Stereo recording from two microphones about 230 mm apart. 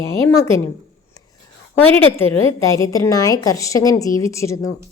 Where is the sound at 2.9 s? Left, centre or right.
Centre.